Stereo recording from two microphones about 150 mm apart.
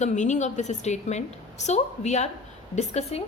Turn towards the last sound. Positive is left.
turn(degrees=45)  # may be behind; listen again after turning